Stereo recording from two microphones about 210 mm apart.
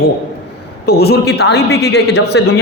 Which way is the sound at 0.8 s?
50° left (ahead or behind).